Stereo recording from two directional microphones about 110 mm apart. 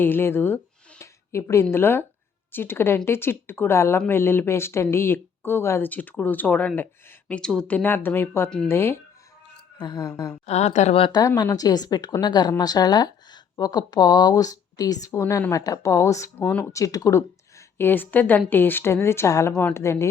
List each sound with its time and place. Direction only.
0.0 s a sound: 20° left (ahead or behind)
1.7 s speech: 20° left (ahead or behind)
9.7 s a woman's voice: 40° left (ahead or behind)
10.4 s speech: 85° left
11.1 s a woman's voice: 35° left (ahead or behind); by 16.6 s 20° left (ahead or behind)
16.7 s speech: 30° left (ahead or behind)
17.7 s speech: 20° left (ahead or behind)